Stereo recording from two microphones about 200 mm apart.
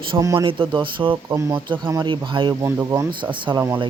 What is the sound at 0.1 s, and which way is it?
Speech, 15° right (ahead or behind).